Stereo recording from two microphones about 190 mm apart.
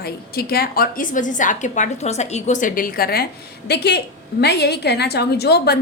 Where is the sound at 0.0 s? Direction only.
55° left (ahead or behind).